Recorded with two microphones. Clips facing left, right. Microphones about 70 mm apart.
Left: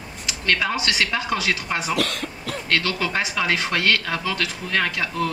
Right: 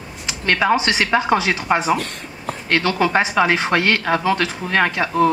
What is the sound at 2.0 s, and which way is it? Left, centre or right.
Speech, left.